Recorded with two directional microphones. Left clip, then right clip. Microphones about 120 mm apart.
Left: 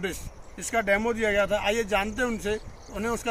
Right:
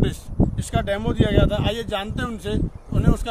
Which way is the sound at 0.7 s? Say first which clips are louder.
Left 3 dB; 20° right (ahead or behind).